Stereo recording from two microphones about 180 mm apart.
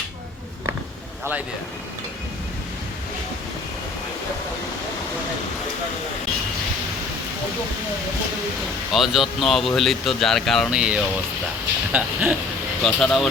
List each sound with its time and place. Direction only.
8.9 s speech: centre (ahead or behind)